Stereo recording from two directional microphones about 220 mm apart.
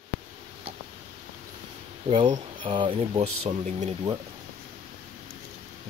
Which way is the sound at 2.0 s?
30° right (ahead or behind).